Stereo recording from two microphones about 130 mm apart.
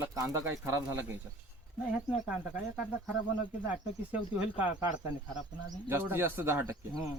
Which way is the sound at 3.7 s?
10° right (ahead or behind).